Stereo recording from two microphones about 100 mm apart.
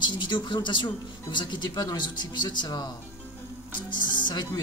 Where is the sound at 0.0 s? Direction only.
50° left (ahead or behind).